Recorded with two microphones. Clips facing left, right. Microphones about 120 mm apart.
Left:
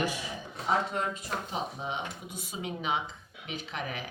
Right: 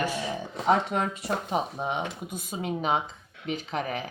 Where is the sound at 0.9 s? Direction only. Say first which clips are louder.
Right 5 dB; 80° right.